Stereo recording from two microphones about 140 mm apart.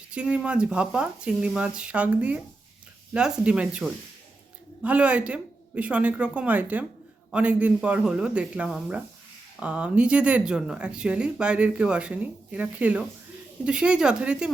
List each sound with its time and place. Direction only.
0.1 s speech: 10° right (ahead or behind)